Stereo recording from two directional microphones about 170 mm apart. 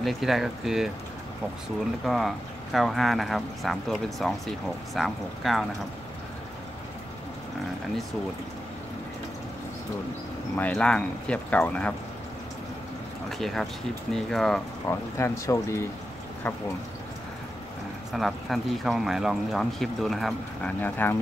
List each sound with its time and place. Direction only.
0.0 s speech: centre (ahead or behind)
2.0 s speech: centre (ahead or behind)
10.5 s speech: 5° left (ahead or behind)
13.3 s speech: centre (ahead or behind)
14.9 s speech: 15° left (ahead or behind)
18.1 s speech: centre (ahead or behind)
20.8 s speech: 10° left (ahead or behind)